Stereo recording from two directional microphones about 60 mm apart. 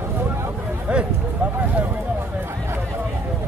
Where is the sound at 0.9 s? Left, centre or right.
Centre.